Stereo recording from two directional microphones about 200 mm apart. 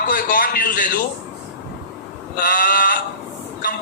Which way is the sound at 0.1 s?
45° left (ahead or behind).